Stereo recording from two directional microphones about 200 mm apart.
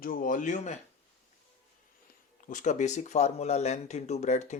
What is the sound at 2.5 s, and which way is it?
Speech, 40° left (ahead or behind).